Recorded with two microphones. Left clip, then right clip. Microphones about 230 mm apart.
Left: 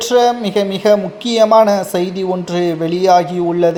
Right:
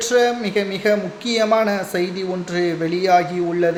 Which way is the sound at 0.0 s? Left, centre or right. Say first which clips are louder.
Left 5 dB; centre.